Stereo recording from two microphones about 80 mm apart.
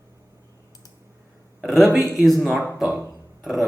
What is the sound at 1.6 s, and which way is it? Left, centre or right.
Speech, centre.